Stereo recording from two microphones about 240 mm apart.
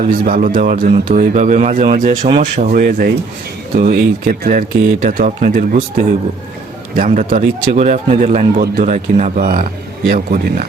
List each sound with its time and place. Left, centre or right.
0.0 s speech: right
6.9 s speech: right